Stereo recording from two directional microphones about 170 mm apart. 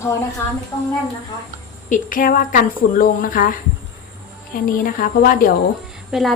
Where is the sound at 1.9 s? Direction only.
50° left (ahead or behind).